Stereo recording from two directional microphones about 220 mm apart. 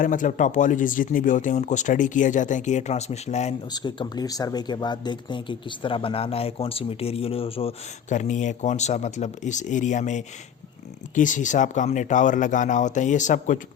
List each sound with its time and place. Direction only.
0.0 s speech: 35° left (ahead or behind)
3.7 s speech: 20° left (ahead or behind)